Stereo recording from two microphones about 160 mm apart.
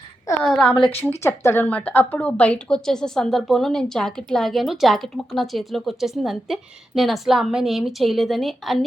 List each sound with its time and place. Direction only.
0.4 s speech: 5° left (ahead or behind)
0.7 s a woman's voice: 35° left (ahead or behind)
1.2 s speech: 15° left (ahead or behind); by 8.8 s centre (ahead or behind)